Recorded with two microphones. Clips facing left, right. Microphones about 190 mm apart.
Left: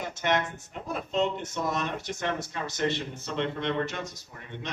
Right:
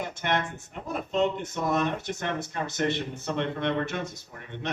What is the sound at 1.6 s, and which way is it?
Speech, 55° right (ahead or behind).